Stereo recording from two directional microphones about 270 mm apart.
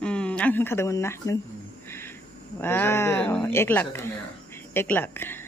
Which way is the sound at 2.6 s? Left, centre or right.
Centre.